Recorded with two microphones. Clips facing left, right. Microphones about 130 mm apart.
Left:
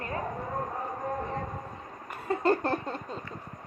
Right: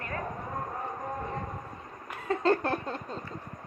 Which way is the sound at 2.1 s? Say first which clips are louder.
Even; 10° left (ahead or behind).